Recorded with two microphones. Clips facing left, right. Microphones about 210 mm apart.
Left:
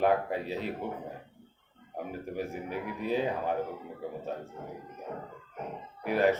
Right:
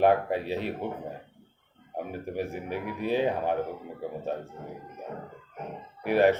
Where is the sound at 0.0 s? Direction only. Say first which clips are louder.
Right 4 dB; 70° right (ahead or behind).